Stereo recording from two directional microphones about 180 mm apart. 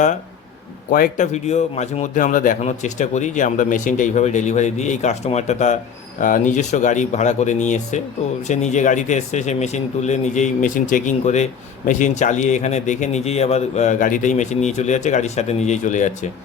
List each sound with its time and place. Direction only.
0.9 s a man's voice: 50° left (ahead or behind)